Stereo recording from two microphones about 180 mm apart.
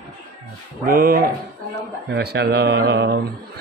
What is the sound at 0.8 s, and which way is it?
Speech, 55° right (ahead or behind).